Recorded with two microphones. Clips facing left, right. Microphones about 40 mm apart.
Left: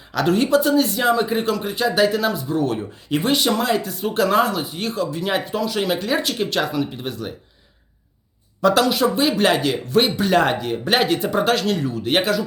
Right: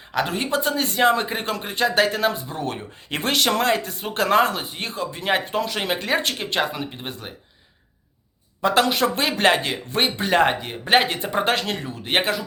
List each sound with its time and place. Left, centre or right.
0.3 s speech: centre
0.5 s speech: right
3.1 s speech: right
3.3 s speech: right
6.4 s speech: right
8.6 s speech: right
8.9 s speech: right